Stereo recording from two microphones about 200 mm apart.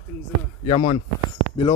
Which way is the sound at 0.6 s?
25° left (ahead or behind).